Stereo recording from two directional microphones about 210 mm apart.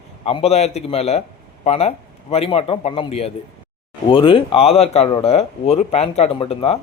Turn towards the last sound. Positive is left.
turn(degrees=25)  # may be behind; listen again after turning